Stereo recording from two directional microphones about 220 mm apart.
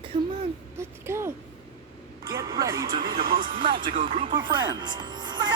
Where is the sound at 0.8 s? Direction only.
10° right (ahead or behind).